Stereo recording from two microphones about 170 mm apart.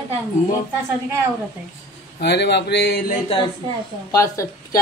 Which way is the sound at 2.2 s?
80° left.